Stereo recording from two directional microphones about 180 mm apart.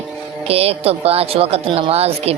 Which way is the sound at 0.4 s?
35° right (ahead or behind).